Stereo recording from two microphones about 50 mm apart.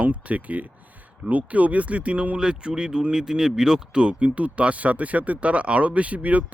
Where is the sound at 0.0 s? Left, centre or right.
Right.